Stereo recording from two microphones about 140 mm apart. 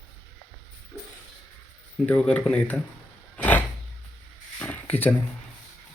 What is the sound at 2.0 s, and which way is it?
Speech, 10° left (ahead or behind).